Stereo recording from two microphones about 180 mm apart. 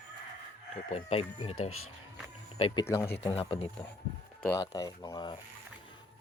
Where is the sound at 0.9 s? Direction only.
35° left (ahead or behind).